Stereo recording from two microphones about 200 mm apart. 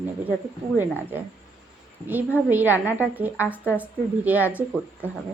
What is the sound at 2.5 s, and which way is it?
A woman's voice, 10° right (ahead or behind).